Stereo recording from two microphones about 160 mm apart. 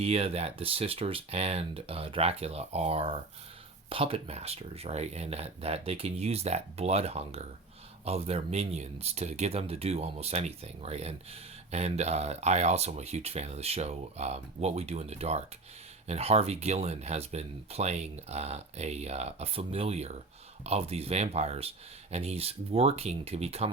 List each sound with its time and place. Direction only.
0.0 s speech: 40° right (ahead or behind)